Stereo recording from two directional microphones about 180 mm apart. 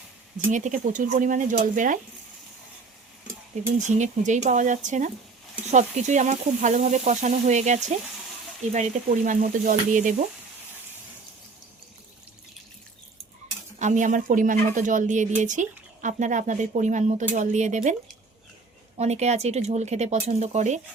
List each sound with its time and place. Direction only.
0.5 s speech: 45° right (ahead or behind)
3.8 s speech: 40° right (ahead or behind)
5.6 s sizzle: 40° right (ahead or behind)
8.7 s speech: 40° right (ahead or behind)
13.7 s speech: 40° right (ahead or behind)
18.9 s sizzle: 40° right (ahead or behind)